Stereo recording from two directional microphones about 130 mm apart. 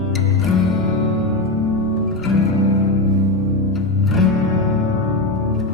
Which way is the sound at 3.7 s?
Centre (ahead or behind).